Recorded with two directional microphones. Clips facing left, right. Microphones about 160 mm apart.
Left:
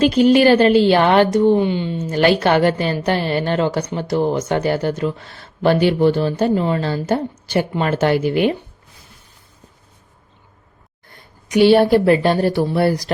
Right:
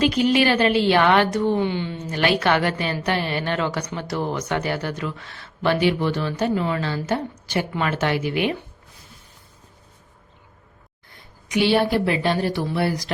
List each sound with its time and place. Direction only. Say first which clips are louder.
0.0 s a woman's voice: left 6 dB; 35° left (ahead or behind)
1.4 s speech: left 6 dB; 20° left (ahead or behind)
2.1 s a woman's voice: left 5 dB; 35° left (ahead or behind)
11.4 s speech: left 7 dB; 40° left (ahead or behind)